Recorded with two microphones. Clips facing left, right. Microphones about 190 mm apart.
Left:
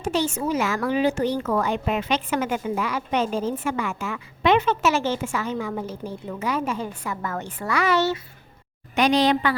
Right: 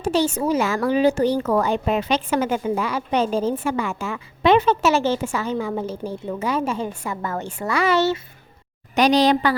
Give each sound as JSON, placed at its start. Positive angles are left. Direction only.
{"t": 0.0, "sound": "speech", "side_deg": -35}
{"t": 9.0, "sound": "speech", "side_deg": -40}